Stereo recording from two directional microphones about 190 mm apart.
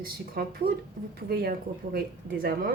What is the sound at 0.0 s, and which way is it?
A woman's voice, 50° right (ahead or behind).